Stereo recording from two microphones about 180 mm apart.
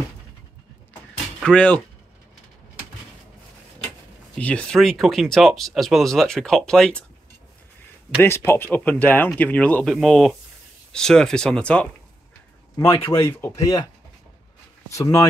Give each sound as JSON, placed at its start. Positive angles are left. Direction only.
{"t": 1.4, "sound": "speech", "side_deg": 5}
{"t": 4.4, "sound": "speech", "side_deg": 5}
{"t": 8.2, "sound": "speech", "side_deg": 15}
{"t": 12.8, "sound": "a man's voice", "side_deg": 30}
{"t": 13.1, "sound": "speech", "side_deg": 15}
{"t": 14.9, "sound": "speech", "side_deg": 15}